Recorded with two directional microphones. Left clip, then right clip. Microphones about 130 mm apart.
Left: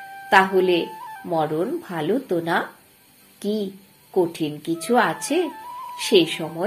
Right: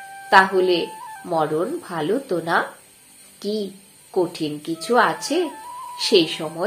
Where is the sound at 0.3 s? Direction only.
35° left (ahead or behind).